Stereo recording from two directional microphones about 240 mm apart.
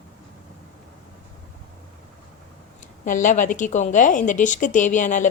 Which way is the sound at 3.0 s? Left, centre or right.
Left.